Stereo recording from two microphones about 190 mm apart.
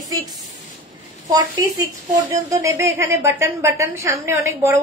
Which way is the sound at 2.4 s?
15° right (ahead or behind).